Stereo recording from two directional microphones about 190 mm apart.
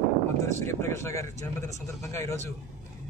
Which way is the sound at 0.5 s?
15° left (ahead or behind).